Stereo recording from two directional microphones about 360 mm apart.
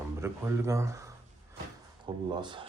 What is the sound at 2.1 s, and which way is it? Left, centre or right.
Speech, centre.